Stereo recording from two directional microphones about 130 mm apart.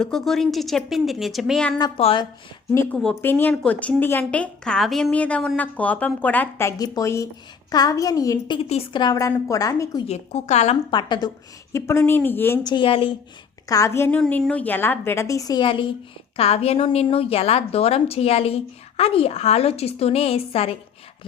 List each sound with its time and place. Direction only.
0.0 s speech: 5° left (ahead or behind)
2.0 s a woman's voice: 45° left (ahead or behind)
2.9 s a woman's voice: 5° left (ahead or behind); by 8.5 s 25° left (ahead or behind)
8.5 s a woman's voice: 40° left (ahead or behind)
10.1 s a woman's voice: 60° left (ahead or behind)
10.9 s a woman's voice: 35° left (ahead or behind)
11.7 s a woman's voice: 20° left (ahead or behind)
12.6 s a woman's voice: 40° left (ahead or behind)
13.7 s a woman's voice: 25° left (ahead or behind)
14.2 s a woman's voice: 10° left (ahead or behind); by 15.6 s 25° left (ahead or behind)
15.6 s a woman's voice: 40° left (ahead or behind)
16.4 s a woman's voice: 50° left (ahead or behind)